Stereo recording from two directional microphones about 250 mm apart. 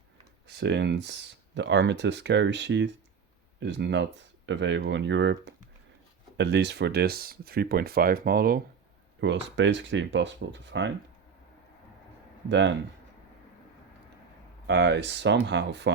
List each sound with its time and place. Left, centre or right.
0.4 s speech: right
12.5 s speech: right
14.7 s speech: right